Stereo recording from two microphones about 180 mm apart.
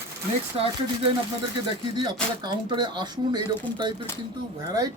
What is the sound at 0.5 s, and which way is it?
Speech, 30° right (ahead or behind).